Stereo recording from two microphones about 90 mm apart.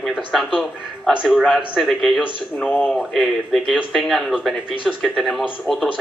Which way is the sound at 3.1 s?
Centre (ahead or behind).